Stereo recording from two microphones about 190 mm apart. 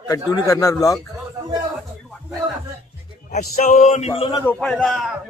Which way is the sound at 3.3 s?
40° left (ahead or behind).